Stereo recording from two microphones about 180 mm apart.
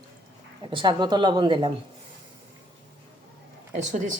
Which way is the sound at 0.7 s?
25° right (ahead or behind).